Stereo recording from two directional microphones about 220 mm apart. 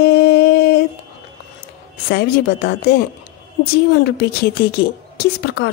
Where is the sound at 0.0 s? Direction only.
50° left (ahead or behind).